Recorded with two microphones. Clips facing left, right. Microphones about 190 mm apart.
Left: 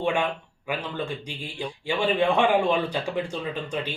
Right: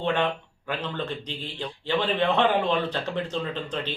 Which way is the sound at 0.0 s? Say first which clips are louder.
Even; 10° left (ahead or behind).